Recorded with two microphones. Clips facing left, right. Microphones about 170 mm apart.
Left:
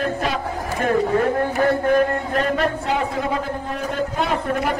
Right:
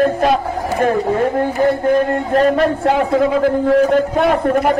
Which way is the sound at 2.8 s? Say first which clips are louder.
Right 9 dB; 90° right.